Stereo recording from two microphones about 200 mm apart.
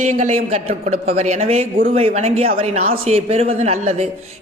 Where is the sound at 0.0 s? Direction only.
35° right (ahead or behind).